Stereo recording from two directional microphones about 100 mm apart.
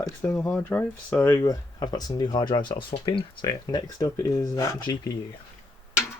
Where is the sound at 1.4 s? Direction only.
40° left (ahead or behind).